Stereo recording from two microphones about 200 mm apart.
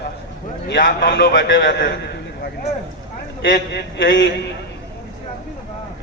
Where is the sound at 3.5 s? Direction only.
45° left (ahead or behind).